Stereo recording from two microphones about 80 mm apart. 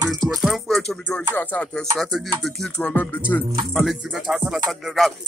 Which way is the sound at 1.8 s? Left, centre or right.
Centre.